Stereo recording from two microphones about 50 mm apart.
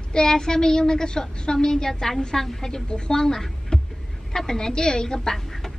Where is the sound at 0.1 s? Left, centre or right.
Centre.